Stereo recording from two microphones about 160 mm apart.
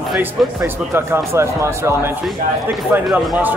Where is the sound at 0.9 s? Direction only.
15° right (ahead or behind).